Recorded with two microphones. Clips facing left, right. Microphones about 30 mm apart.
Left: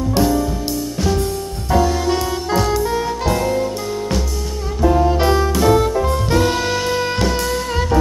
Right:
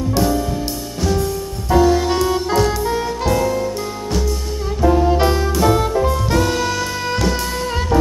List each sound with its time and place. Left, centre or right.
1.7 s music: centre
4.8 s saxophone: centre
5.6 s music: centre
6.0 s jazz: centre
6.4 s music: centre
7.0 s music: centre